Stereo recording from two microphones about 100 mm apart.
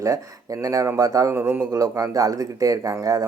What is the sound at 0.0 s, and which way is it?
Speech, 35° right (ahead or behind).